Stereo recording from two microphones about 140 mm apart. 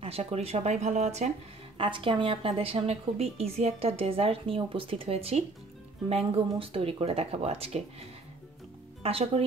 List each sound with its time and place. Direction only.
0.0 s a woman's voice: 45° right (ahead or behind)
1.8 s a woman's voice: 40° right (ahead or behind)
9.0 s a woman's voice: 45° right (ahead or behind)